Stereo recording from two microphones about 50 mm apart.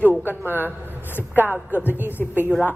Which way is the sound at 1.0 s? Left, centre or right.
Left.